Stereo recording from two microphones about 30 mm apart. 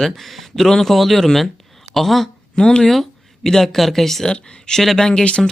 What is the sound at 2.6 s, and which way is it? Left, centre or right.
Speech, left.